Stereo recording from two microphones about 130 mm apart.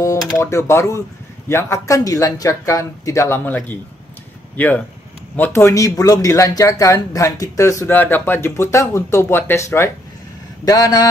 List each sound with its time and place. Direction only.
0.4 s speech: 20° left (ahead or behind)